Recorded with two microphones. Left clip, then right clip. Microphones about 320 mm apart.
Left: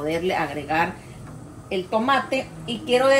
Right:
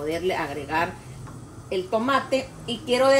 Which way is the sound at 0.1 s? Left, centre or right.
Centre.